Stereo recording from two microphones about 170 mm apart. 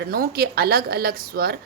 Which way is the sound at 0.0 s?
65° right (ahead or behind).